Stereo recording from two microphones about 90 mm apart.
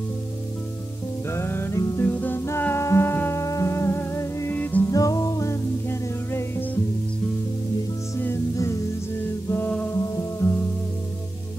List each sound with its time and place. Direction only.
1.3 s music: 25° left (ahead or behind)
2.0 s music: 20° left (ahead or behind)
2.6 s humming: 30° left (ahead or behind)
4.6 s music: 20° left (ahead or behind)
4.9 s music: 40° left (ahead or behind)
9.2 s music: 25° left (ahead or behind)
9.9 s music: 35° left (ahead or behind)